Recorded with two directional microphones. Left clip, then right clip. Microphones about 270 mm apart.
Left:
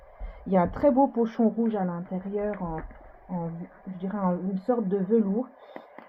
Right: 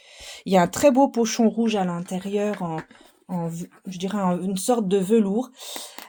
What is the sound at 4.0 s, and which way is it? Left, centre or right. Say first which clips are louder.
Speech: right 4 dB; right.